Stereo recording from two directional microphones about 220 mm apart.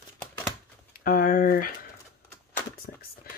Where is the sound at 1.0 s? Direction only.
40° left (ahead or behind).